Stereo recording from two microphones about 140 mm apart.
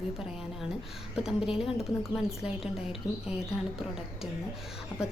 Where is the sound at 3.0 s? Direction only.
20° left (ahead or behind).